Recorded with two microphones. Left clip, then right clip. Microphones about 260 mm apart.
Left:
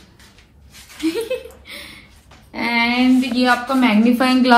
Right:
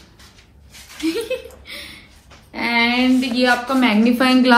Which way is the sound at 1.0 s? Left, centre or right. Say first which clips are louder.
Left 1 dB; left.